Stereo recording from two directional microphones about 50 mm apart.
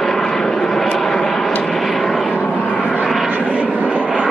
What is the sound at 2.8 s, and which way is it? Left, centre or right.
Vehicle, left.